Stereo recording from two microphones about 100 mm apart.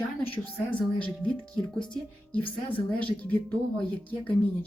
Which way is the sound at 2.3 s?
60° left (ahead or behind).